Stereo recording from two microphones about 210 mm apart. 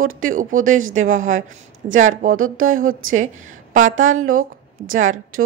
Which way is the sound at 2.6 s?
80° right.